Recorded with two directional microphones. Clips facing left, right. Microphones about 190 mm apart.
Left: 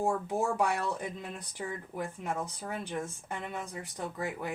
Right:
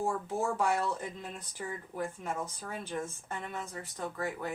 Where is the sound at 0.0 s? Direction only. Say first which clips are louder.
Left 2 dB; 15° left (ahead or behind).